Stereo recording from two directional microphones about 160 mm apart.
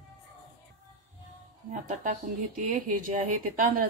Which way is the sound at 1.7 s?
55° right (ahead or behind).